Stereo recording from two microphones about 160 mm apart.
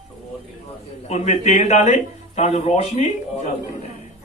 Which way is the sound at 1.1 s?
45° left (ahead or behind).